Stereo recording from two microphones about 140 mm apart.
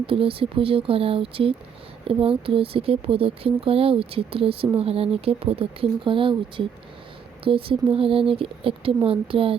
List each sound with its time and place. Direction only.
0.0 s speech: 40° right (ahead or behind)